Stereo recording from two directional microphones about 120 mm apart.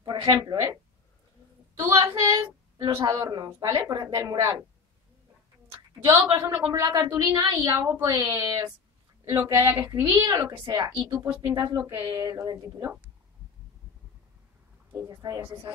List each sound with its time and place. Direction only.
0.0 s a woman's voice: 35° right (ahead or behind)
1.8 s a woman's voice: 25° right (ahead or behind)
6.0 s a woman's voice: 40° right (ahead or behind)
6.4 s a woman's voice: 20° right (ahead or behind)
7.3 s a woman's voice: 35° right (ahead or behind)
9.4 s a woman's voice: 25° right (ahead or behind)
11.2 s a woman's voice: 20° right (ahead or behind)
15.0 s a woman's voice: 35° right (ahead or behind)